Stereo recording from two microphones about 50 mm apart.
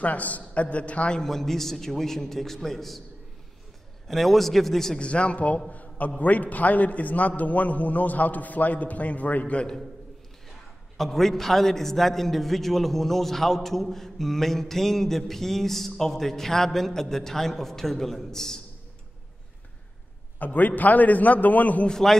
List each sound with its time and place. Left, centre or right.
0.0 s a man's voice: left
1.2 s a man's voice: centre
4.1 s a man's voice: centre
4.9 s a man's voice: left
11.0 s a man's voice: centre
20.3 s a man's voice: left
21.8 s a man's voice: centre